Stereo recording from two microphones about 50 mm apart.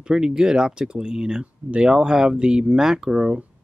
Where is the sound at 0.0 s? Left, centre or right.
Centre.